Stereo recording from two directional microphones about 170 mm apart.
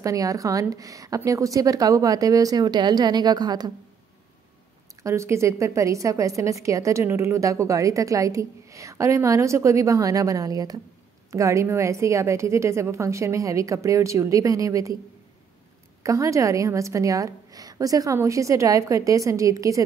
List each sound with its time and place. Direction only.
0.0 s a woman's voice: 20° right (ahead or behind)
5.0 s a woman's voice: 15° right (ahead or behind)
16.0 s a woman's voice: 20° right (ahead or behind)